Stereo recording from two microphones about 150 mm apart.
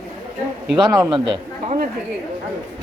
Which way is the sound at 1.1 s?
35° right (ahead or behind).